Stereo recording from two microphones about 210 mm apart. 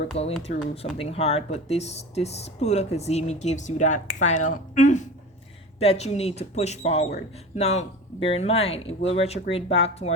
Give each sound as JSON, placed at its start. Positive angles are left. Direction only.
{"t": 0.4, "sound": "speech", "side_deg": 30}